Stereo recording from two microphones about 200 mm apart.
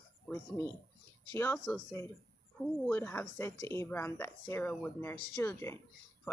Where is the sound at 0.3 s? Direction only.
10° left (ahead or behind).